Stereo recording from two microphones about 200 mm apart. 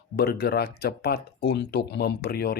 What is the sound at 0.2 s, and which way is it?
Speech, 55° left (ahead or behind).